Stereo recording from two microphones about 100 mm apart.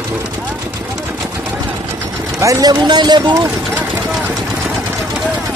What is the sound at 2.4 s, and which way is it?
Speech, 35° right (ahead or behind).